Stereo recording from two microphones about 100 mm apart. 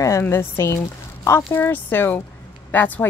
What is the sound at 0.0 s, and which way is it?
A woman's voice, 30° left (ahead or behind).